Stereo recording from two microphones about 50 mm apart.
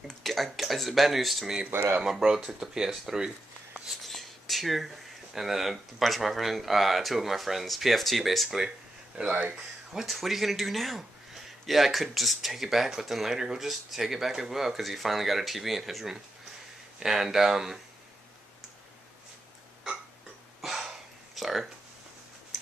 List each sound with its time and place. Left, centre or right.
0.2 s speech: centre
1.7 s speech: right
2.0 s speech: centre
3.8 s speech: centre
9.2 s speech: centre
10.0 s speech: centre
20.6 s dog: centre
21.4 s speech: centre